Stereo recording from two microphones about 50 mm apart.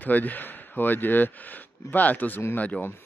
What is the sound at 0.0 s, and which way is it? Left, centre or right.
A man's voice, left.